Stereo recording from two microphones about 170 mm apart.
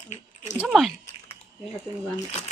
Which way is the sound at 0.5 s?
5° right (ahead or behind).